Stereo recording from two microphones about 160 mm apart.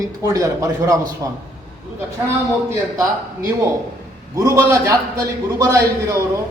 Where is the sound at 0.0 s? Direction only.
20° right (ahead or behind).